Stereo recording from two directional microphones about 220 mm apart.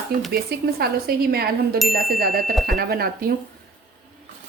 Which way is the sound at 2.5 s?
Centre (ahead or behind).